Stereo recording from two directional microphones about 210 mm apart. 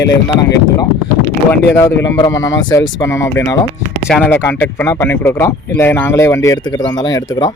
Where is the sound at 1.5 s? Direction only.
10° left (ahead or behind).